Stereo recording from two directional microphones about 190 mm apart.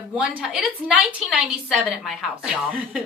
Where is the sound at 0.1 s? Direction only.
5° right (ahead or behind).